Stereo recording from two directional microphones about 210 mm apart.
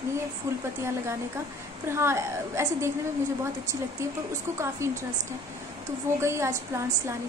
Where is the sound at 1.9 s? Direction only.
10° right (ahead or behind).